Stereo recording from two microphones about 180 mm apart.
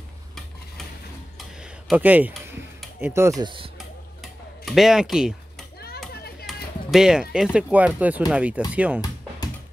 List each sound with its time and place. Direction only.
1.6 s a sound: 5° right (ahead or behind)
3.0 s speech: 15° right (ahead or behind)
3.7 s tick-tock: centre (ahead or behind)
6.4 s music: centre (ahead or behind)
7.5 s speech: 10° right (ahead or behind)